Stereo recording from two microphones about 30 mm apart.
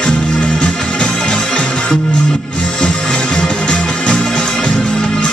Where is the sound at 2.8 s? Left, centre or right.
Left.